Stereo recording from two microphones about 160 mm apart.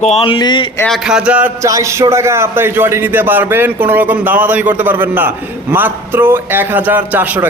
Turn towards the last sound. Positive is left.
turn(degrees=-10)  # may be behind; listen again after turning